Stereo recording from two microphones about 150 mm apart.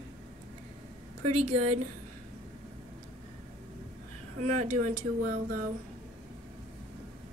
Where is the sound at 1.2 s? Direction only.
45° right (ahead or behind).